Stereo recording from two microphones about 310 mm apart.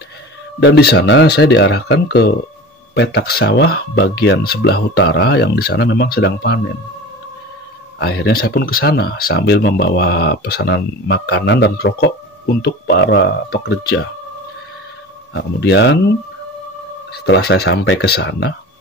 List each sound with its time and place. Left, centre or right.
0.6 s speech: left
8.0 s speech: left
15.3 s speech: left
17.1 s speech: left